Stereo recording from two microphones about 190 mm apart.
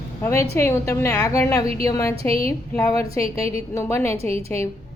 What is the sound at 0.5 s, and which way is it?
A woman's voice, 15° left (ahead or behind).